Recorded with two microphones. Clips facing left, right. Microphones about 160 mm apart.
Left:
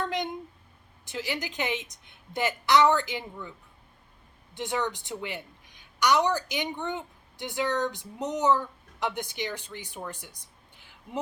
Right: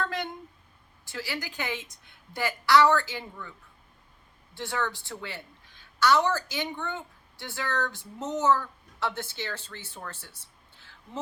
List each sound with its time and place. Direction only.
0.0 s a sound: 20° left (ahead or behind)
1.0 s a woman's voice: 20° left (ahead or behind)
4.5 s a woman's voice: 20° left (ahead or behind)